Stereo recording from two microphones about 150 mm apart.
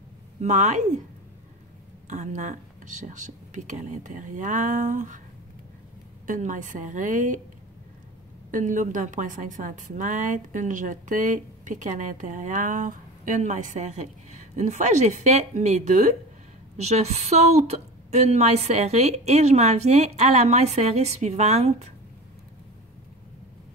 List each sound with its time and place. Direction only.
0.4 s a woman's voice: 55° right (ahead or behind)
2.0 s a woman's voice: 55° right (ahead or behind)
6.2 s a woman's voice: 60° right (ahead or behind)
8.5 s a woman's voice: 60° right (ahead or behind)